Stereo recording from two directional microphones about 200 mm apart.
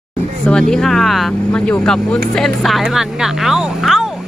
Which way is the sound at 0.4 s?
5° left (ahead or behind).